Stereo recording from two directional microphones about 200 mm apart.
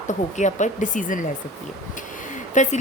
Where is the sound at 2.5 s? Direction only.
35° left (ahead or behind).